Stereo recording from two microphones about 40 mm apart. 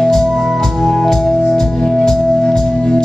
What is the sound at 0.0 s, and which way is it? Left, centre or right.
Organ, centre.